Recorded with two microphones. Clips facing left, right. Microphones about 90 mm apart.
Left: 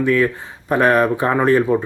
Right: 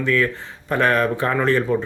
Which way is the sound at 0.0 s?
15° left (ahead or behind).